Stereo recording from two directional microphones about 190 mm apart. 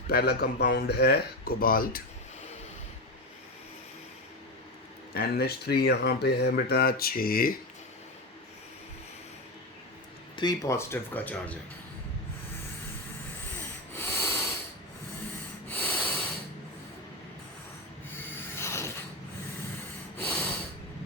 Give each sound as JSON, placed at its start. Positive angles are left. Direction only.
{"t": 0.1, "sound": "speech", "side_deg": 55}
{"t": 5.1, "sound": "speech", "side_deg": 55}
{"t": 10.3, "sound": "speech", "side_deg": 20}
{"t": 13.9, "sound": "snort", "side_deg": 15}
{"t": 15.7, "sound": "snort", "side_deg": 10}
{"t": 18.5, "sound": "mechanisms", "side_deg": 15}
{"t": 20.1, "sound": "snort", "side_deg": 10}